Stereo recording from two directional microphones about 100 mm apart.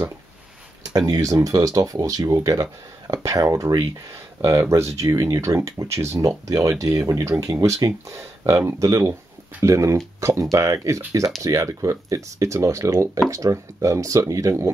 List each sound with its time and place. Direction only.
0.9 s speech: 40° right (ahead or behind)